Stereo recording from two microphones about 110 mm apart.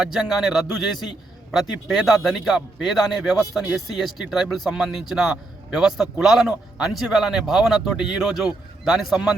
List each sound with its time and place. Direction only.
0.0 s speech: 5° right (ahead or behind)